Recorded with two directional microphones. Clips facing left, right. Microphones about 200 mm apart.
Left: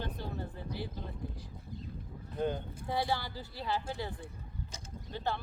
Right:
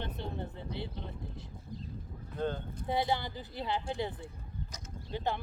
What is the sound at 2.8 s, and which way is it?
Speech, 20° right (ahead or behind).